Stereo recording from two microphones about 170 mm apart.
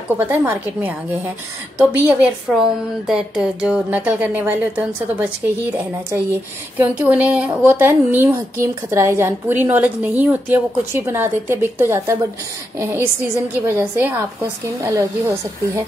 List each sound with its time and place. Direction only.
0.2 s a woman's voice: 10° right (ahead or behind)